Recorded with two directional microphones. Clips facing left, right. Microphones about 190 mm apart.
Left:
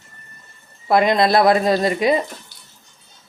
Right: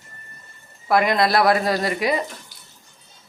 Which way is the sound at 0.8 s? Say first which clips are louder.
Left 3 dB; 25° left (ahead or behind).